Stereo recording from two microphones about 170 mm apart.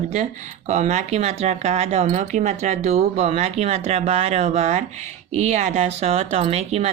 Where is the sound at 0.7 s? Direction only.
45° right (ahead or behind).